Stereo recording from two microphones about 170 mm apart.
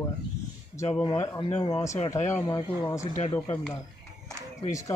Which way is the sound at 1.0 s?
20° left (ahead or behind).